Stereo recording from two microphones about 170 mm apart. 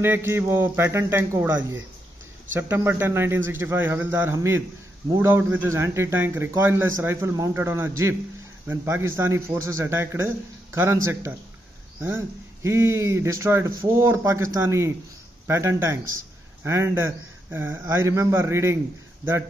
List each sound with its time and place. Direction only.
0.0 s a man's voice: 15° right (ahead or behind)
2.5 s a man's voice: 15° right (ahead or behind)